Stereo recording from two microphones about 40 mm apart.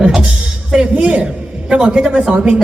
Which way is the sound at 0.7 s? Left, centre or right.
Right.